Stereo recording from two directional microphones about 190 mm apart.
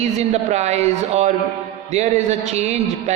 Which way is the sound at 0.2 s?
35° right (ahead or behind).